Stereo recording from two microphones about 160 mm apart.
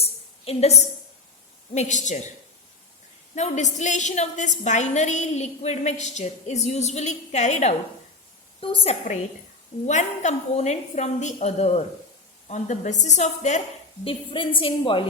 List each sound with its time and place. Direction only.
0.0 s a sound: 40° left (ahead or behind)
1.7 s a woman's voice: 50° left (ahead or behind)
3.3 s a woman's voice: 45° left (ahead or behind)
8.6 s a woman's voice: 35° left (ahead or behind)
14.0 s a woman's voice: 35° left (ahead or behind)